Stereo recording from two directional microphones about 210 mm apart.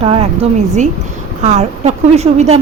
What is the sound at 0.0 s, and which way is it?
Speech, 25° right (ahead or behind).